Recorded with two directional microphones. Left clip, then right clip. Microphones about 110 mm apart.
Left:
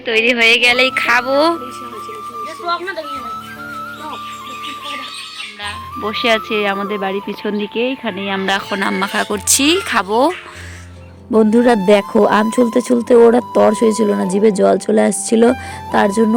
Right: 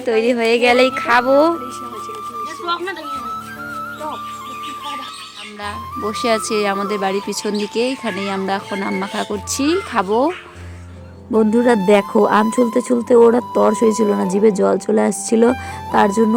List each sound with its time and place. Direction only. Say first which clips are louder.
0.0 s a woman's voice: left 4 dB; 15° right (ahead or behind)
0.8 s speech: left 1 dB; centre (ahead or behind)
6.1 s speech: left 3 dB; 20° right (ahead or behind)
8.4 s speech: left 4 dB; 5° right (ahead or behind)
11.3 s speech: left 3 dB; 35° left (ahead or behind)